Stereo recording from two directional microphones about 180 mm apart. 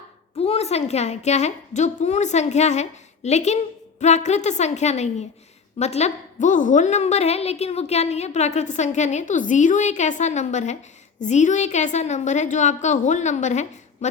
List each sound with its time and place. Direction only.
0.3 s a woman's voice: 35° left (ahead or behind)